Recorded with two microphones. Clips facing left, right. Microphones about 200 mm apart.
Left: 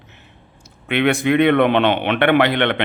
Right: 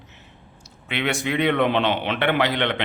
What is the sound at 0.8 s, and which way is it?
A man's voice, 55° left (ahead or behind).